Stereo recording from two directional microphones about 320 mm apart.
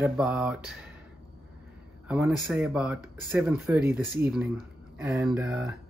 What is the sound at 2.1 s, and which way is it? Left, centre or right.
Speech, centre.